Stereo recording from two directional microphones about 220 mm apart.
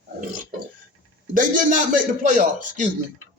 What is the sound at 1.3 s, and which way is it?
Speech, 35° right (ahead or behind).